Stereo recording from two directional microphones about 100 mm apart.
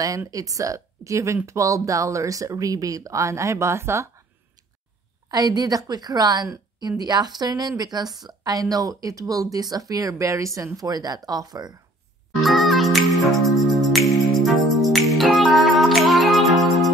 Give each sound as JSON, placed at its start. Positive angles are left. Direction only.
{"t": 0.3, "sound": "speech", "side_deg": -35}
{"t": 5.3, "sound": "speech", "side_deg": -40}
{"t": 12.4, "sound": "music", "side_deg": 0}